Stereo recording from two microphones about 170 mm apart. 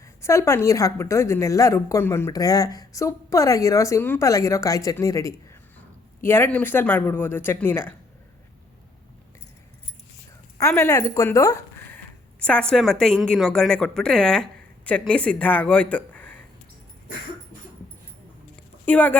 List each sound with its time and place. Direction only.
0.0 s a woman's voice: 15° left (ahead or behind)
10.6 s a woman's voice: 15° left (ahead or behind)
12.4 s a woman's voice: 5° left (ahead or behind)
18.9 s speech: 10° left (ahead or behind)